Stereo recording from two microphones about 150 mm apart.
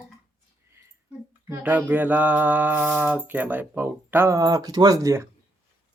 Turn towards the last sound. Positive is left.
turn(degrees=-20)  # may be behind; listen again after turning